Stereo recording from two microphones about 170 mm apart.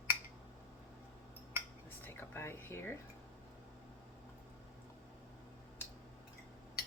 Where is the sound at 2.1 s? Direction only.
15° left (ahead or behind).